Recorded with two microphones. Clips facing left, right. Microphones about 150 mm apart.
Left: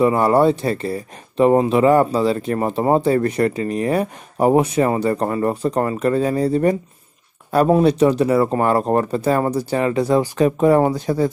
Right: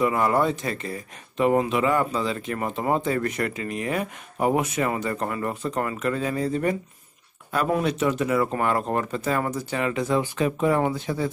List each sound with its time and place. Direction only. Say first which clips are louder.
0.0 s speech: left 7 dB; 30° left (ahead or behind)